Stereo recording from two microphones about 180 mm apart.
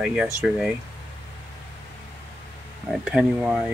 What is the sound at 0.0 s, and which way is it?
Speech, 5° right (ahead or behind).